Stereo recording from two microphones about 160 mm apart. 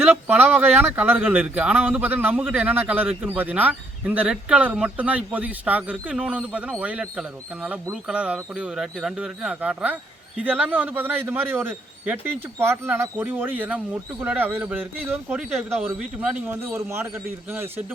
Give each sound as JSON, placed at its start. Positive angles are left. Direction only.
{"t": 0.0, "sound": "speech", "side_deg": -10}